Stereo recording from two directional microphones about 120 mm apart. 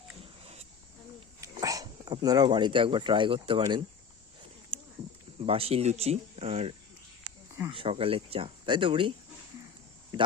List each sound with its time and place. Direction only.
1.4 s speech: 30° right (ahead or behind)
5.5 s speech: 55° right (ahead or behind)